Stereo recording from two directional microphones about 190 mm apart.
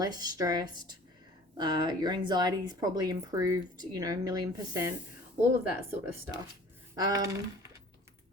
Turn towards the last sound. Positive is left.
turn(degrees=-20)  # may be behind; listen again after turning